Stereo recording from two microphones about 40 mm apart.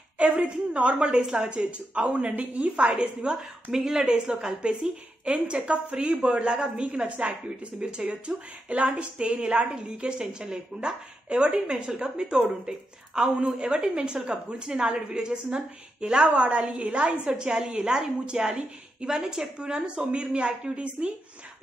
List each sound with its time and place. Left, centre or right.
0.2 s speech: right
1.2 s speech: centre
1.5 s speech: right
3.7 s a woman's voice: centre